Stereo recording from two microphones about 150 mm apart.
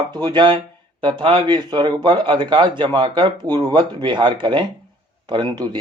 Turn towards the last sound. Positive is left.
turn(degrees=-30)  # may be behind; listen again after turning